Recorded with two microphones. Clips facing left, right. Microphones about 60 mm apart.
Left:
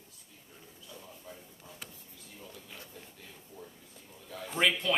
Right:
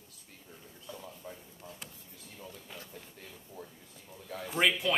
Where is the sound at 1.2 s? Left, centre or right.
Centre.